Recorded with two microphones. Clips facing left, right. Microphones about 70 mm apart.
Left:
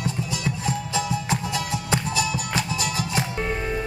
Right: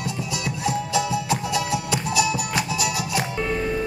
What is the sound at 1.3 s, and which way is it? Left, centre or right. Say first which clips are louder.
Music: right 4 dB; centre.